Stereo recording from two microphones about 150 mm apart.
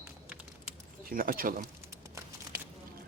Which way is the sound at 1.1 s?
70° right (ahead or behind).